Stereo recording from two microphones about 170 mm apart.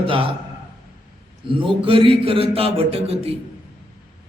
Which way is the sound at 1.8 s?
30° right (ahead or behind).